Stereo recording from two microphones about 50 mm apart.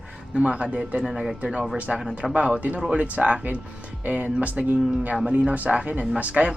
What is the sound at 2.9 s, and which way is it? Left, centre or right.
Speech, right.